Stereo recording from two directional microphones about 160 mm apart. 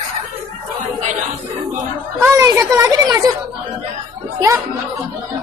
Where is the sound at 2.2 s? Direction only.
20° right (ahead or behind).